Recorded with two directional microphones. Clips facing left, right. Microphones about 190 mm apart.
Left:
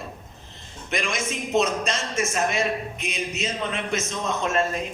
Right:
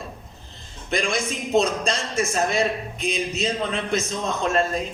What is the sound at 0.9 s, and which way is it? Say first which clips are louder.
A man's voice: right 3 dB; 35° right (ahead or behind).